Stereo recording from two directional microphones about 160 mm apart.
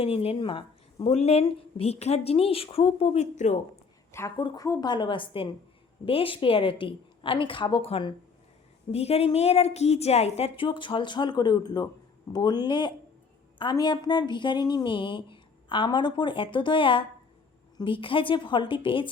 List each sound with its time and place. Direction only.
0.0 s speech: 40° left (ahead or behind)
1.1 s a woman's voice: 40° left (ahead or behind)
4.4 s a woman's voice: 25° left (ahead or behind)